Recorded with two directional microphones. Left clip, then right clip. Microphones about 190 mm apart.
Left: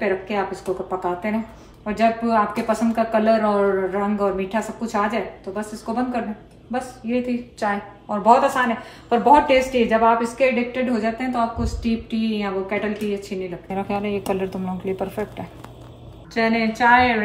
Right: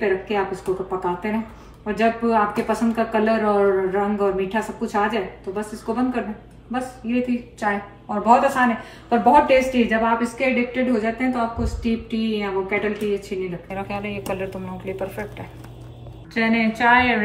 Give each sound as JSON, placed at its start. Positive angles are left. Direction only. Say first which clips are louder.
{"t": 0.0, "sound": "a woman's voice", "louder": "right 1 dB", "side_deg": 0}
{"t": 13.7, "sound": "speech", "louder": "left 3 dB", "side_deg": 45}
{"t": 16.3, "sound": "a woman's voice", "louder": "left 1 dB", "side_deg": 5}